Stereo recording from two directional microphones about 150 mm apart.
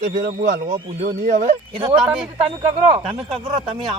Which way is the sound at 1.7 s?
35° right (ahead or behind).